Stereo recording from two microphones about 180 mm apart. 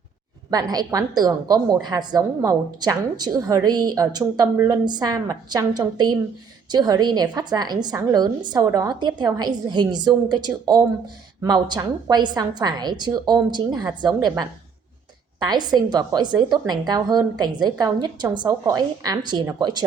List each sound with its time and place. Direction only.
0.5 s a woman's voice: 20° right (ahead or behind)